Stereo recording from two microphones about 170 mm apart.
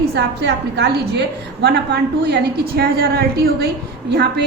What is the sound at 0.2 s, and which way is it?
A woman's voice, 80° right.